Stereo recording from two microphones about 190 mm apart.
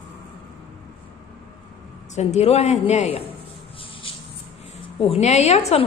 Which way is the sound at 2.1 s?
35° left (ahead or behind).